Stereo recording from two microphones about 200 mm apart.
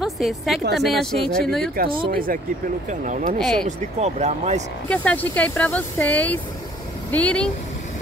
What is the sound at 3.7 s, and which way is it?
Speech, 35° right (ahead or behind).